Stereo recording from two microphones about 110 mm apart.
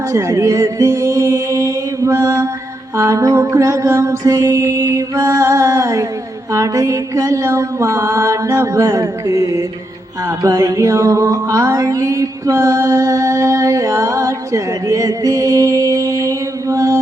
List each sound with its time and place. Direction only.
0.1 s music: 25° right (ahead or behind)